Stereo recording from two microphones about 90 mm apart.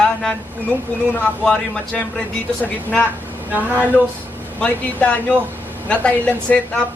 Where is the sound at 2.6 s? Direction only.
20° left (ahead or behind).